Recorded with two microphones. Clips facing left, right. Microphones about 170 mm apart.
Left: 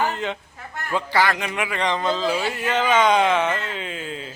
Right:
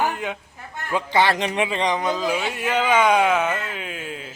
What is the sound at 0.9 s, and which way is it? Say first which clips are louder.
Speech: right 1 dB; 20° right (ahead or behind).